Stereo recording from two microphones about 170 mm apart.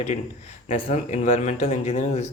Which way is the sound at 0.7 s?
45° left (ahead or behind).